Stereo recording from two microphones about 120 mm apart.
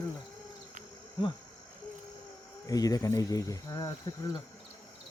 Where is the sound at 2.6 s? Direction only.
30° left (ahead or behind).